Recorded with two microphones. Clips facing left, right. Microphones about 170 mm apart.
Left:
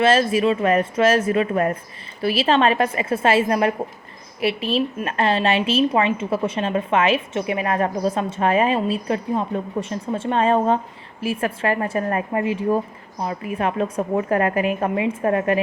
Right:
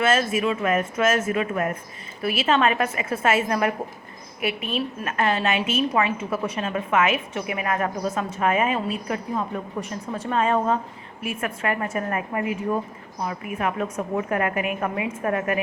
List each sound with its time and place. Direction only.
0.0 s a woman's voice: 30° left (ahead or behind)